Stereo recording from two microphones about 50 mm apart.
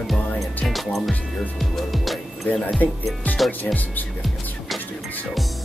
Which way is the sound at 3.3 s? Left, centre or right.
Left.